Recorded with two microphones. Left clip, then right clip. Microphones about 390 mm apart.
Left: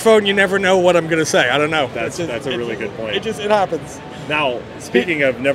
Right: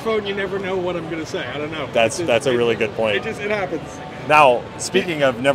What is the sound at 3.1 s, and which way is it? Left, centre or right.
Speech, left.